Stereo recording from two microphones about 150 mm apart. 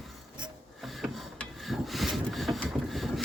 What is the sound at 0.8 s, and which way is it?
Wood, centre (ahead or behind).